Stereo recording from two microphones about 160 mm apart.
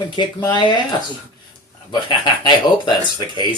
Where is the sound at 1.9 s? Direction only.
30° left (ahead or behind).